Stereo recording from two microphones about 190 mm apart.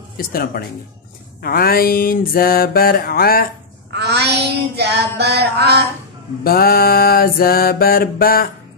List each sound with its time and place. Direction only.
0.3 s mantra: 50° left (ahead or behind)
3.9 s child singing: 60° right (ahead or behind)
6.4 s mantra: 50° left (ahead or behind)